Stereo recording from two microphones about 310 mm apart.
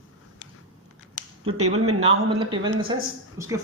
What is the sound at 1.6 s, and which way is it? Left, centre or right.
Speech, right.